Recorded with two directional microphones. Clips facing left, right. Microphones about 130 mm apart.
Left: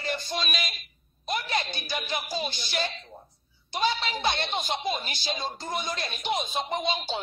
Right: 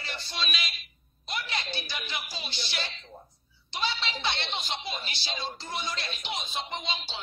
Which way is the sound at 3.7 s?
45° left (ahead or behind).